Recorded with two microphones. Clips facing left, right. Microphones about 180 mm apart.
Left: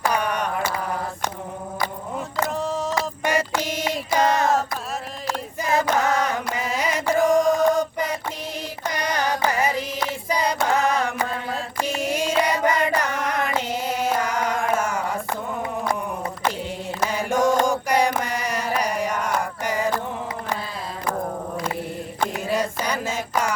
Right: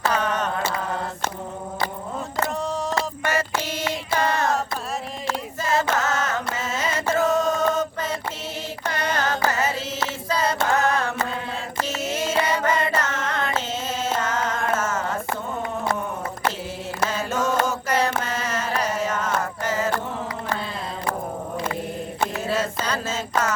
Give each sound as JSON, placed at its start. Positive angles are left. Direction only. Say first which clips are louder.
{"t": 0.0, "sound": "mantra", "louder": "even", "side_deg": 15}
{"t": 2.6, "sound": "a sound", "louder": "left 1 dB", "side_deg": 0}
{"t": 2.9, "sound": "music", "louder": "left 1 dB", "side_deg": 15}
{"t": 5.6, "sound": "music", "louder": "left 2 dB", "side_deg": 15}
{"t": 8.9, "sound": "carnatic music", "louder": "even", "side_deg": 15}
{"t": 9.5, "sound": "music", "louder": "left 2 dB", "side_deg": 15}
{"t": 10.0, "sound": "a sound", "louder": "right 1 dB", "side_deg": 15}
{"t": 11.8, "sound": "carnatic music", "louder": "left 2 dB", "side_deg": 15}
{"t": 17.0, "sound": "mantra", "louder": "left 3 dB", "side_deg": 15}
{"t": 22.4, "sound": "a sound", "louder": "left 1 dB", "side_deg": 15}